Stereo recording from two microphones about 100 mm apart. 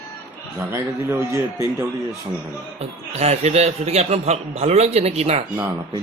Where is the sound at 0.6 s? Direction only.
25° right (ahead or behind).